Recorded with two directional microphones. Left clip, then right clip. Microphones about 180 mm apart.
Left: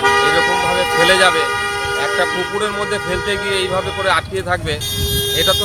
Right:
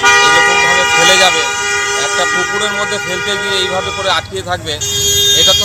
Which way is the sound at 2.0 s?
5° left (ahead or behind).